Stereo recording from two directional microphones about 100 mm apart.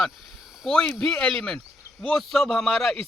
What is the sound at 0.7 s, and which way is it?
Speech, 5° left (ahead or behind).